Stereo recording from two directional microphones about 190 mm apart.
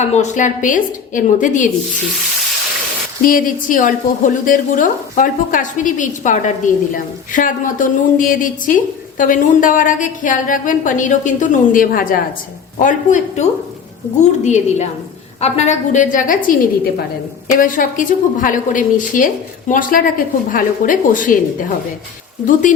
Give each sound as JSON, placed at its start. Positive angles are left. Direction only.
{"t": 0.0, "sound": "a woman's voice", "side_deg": 35}
{"t": 3.2, "sound": "a woman's voice", "side_deg": 45}
{"t": 17.6, "sound": "a woman's voice", "side_deg": 45}